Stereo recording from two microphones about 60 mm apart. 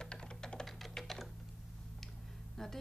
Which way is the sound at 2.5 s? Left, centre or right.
Centre.